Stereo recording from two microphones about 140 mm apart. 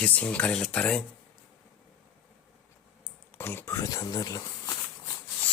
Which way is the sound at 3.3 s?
15° left (ahead or behind).